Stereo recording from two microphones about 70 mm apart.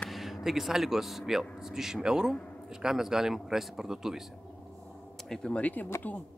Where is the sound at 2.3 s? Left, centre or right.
Centre.